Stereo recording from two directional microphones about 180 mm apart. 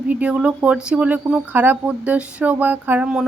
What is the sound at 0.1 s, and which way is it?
Speech, 5° right (ahead or behind).